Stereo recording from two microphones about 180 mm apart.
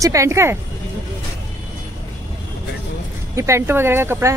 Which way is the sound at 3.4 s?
15° right (ahead or behind).